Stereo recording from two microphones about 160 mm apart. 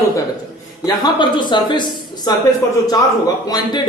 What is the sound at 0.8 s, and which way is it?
Speech, 25° left (ahead or behind).